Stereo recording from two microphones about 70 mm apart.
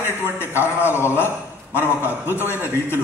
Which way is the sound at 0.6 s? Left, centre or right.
Left.